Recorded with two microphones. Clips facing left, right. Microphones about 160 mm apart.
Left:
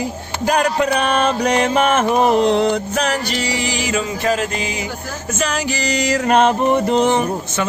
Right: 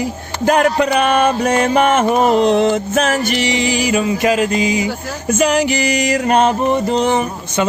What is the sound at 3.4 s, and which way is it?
Music, 20° right (ahead or behind).